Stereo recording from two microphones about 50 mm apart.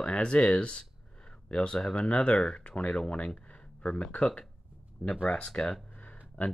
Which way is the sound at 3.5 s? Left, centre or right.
Left.